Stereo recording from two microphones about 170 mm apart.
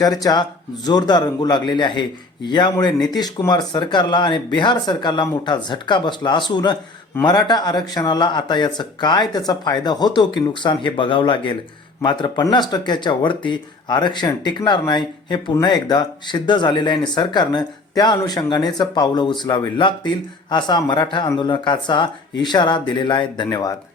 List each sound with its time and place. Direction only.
0.0 s speech: 20° left (ahead or behind)